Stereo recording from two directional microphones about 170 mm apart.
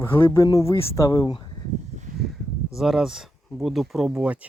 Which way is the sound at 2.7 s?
Centre (ahead or behind).